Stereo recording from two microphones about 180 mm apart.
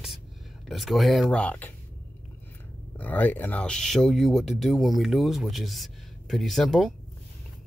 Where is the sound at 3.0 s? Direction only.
10° left (ahead or behind).